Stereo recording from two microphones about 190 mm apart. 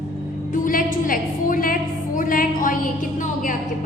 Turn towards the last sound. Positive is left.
turn(degrees=45)  # may be behind; listen again after turning